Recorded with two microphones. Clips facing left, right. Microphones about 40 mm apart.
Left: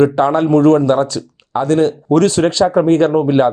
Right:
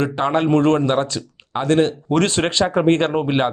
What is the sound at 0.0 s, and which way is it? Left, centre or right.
Speech, right.